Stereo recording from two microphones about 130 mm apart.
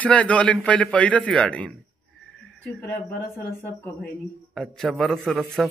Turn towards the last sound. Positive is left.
turn(degrees=0)  # may be behind; listen again after turning